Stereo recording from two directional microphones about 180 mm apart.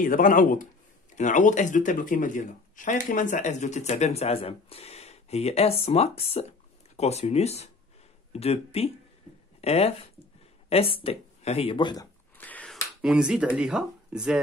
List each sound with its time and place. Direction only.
0.0 s a man's voice: 50° left (ahead or behind); by 12.1 s 25° left (ahead or behind)
12.4 s a sound: 10° left (ahead or behind)
13.0 s speech: 5° right (ahead or behind)